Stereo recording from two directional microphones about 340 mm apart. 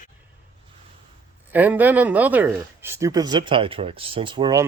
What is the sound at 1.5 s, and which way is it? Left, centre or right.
Speech, centre.